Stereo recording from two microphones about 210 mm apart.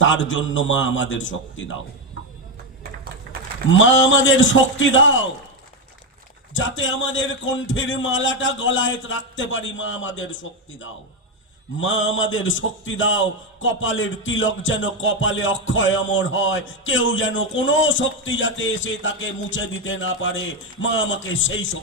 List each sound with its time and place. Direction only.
0.0 s a man's voice: 65° left (ahead or behind)
3.3 s a sound: 45° right (ahead or behind)
3.7 s a man's voice: 65° left (ahead or behind)
6.5 s a man's voice: 65° left (ahead or behind)
11.8 s a man's voice: 65° left (ahead or behind)